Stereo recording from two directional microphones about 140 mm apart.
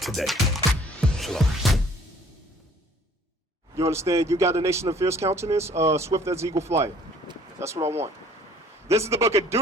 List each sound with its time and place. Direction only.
0.0 s speech: centre (ahead or behind)
1.0 s music: 5° left (ahead or behind)
3.8 s speech: 20° right (ahead or behind)
7.9 s speech: 50° right (ahead or behind)
8.9 s speech: 20° right (ahead or behind)